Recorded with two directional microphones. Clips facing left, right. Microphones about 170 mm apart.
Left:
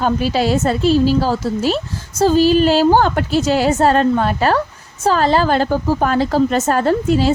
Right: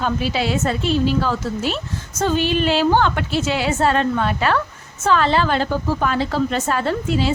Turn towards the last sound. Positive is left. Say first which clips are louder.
# left 6 dB
turn(degrees=40)  # may be behind; listen again after turning